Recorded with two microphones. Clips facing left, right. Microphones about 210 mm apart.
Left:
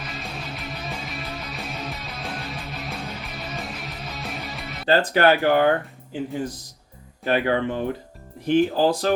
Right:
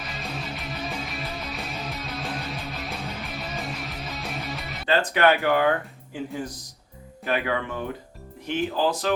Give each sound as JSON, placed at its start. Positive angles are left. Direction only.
{"t": 0.0, "sound": "music", "side_deg": 0}
{"t": 4.9, "sound": "speech", "side_deg": 35}
{"t": 7.3, "sound": "speech", "side_deg": 30}